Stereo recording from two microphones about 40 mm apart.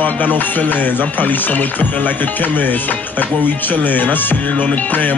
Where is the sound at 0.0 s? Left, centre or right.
Left.